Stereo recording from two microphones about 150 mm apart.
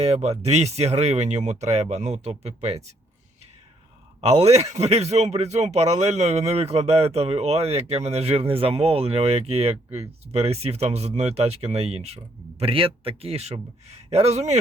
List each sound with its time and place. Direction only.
0.0 s speech: 45° right (ahead or behind)
4.2 s speech: 40° right (ahead or behind)